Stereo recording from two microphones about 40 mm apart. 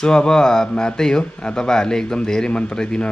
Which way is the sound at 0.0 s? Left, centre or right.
Centre.